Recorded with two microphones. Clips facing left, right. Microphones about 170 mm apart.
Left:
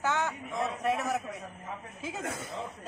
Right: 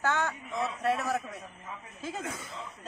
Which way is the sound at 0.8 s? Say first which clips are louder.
Right 1 dB; 15° left (ahead or behind).